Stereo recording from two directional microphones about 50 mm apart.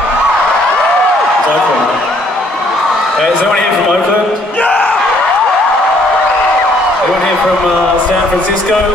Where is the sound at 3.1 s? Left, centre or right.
Centre.